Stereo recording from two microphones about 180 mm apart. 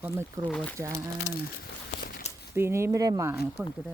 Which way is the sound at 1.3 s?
45° left (ahead or behind).